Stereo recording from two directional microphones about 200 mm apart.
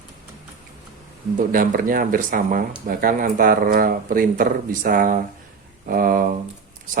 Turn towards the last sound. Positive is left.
turn(degrees=-45)  # may be behind; listen again after turning